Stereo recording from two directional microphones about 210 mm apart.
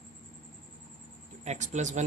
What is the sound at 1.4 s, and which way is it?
Speech, 35° right (ahead or behind).